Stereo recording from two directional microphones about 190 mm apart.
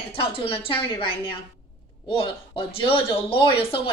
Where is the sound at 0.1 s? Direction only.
30° left (ahead or behind).